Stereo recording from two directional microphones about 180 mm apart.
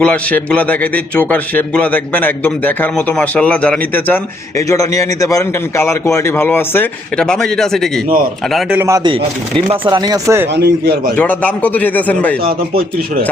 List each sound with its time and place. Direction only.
0.0 s a man's voice: 5° left (ahead or behind)
8.5 s a man's voice: 10° right (ahead or behind)
9.9 s speech: 20° right (ahead or behind)
10.5 s speech: 60° right (ahead or behind)
11.2 s a man's voice: 10° left (ahead or behind)
12.5 s speech: 60° right (ahead or behind)